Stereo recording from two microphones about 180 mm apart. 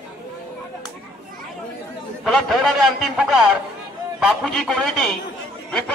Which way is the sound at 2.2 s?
Centre (ahead or behind).